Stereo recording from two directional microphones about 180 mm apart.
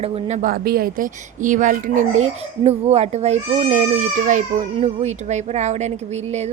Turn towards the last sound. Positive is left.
turn(degrees=-40)  # may be behind; listen again after turning